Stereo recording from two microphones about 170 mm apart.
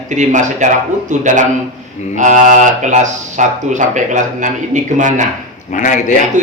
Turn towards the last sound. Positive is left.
turn(degrees=50)  # may be behind; listen again after turning